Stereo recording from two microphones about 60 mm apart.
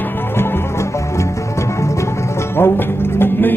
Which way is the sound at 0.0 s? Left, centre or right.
Left.